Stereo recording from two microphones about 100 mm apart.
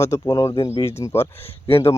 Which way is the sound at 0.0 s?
30° left (ahead or behind).